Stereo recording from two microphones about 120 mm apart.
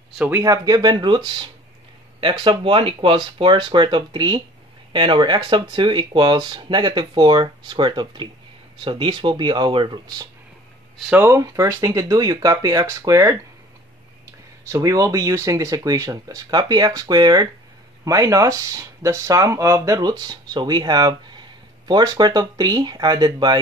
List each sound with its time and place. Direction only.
0.4 s speech: 35° right (ahead or behind)
11.1 s speech: 25° right (ahead or behind)